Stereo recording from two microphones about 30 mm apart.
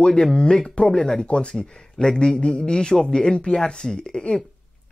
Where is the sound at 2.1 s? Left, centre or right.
Left.